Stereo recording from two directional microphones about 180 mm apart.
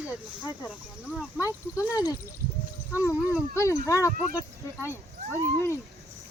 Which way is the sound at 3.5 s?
15° left (ahead or behind).